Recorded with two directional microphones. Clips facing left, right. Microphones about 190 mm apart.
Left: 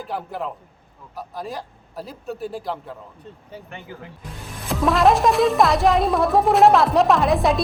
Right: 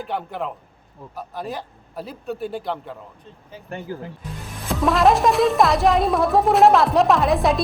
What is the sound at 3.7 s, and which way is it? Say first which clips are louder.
Speech: right 10 dB; 40° right (ahead or behind).